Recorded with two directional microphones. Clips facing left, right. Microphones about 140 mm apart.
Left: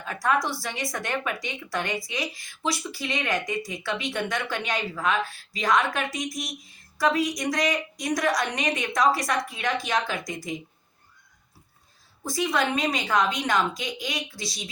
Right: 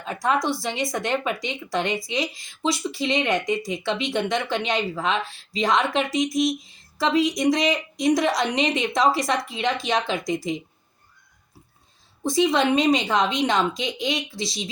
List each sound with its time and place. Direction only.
0.0 s a woman's voice: 25° right (ahead or behind)
12.2 s speech: 25° right (ahead or behind)